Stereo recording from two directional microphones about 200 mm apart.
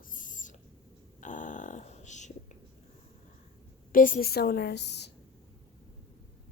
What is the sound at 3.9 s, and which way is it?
A woman's voice, 45° left (ahead or behind).